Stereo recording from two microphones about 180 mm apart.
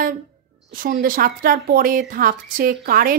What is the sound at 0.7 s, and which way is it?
A woman's voice, 50° right (ahead or behind).